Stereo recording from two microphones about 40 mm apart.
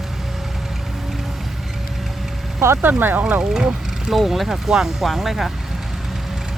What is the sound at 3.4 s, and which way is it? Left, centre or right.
Speech, centre.